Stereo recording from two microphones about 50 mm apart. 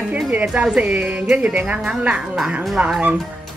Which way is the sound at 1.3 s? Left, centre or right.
Right.